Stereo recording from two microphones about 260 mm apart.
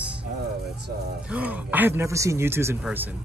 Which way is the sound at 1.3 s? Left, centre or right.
Centre.